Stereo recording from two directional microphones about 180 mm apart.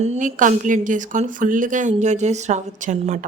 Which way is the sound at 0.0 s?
40° right (ahead or behind).